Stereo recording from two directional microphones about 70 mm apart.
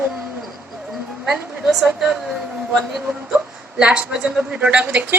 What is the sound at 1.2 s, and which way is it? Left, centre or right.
Speech, centre.